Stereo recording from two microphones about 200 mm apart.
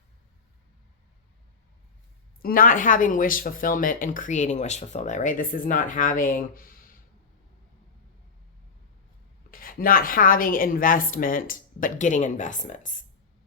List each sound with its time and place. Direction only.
2.4 s speech: 45° left (ahead or behind)
9.5 s speech: 45° left (ahead or behind)